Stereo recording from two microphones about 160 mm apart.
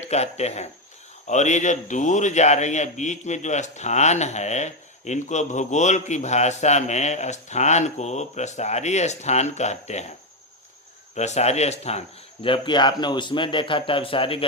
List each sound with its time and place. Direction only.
0.0 s a man's voice: 45° left (ahead or behind)
11.1 s speech: 45° left (ahead or behind)